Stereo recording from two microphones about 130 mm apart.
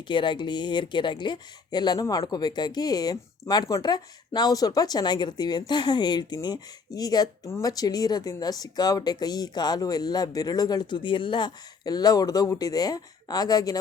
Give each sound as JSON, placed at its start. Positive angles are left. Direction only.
{"t": 0.1, "sound": "speech", "side_deg": 40}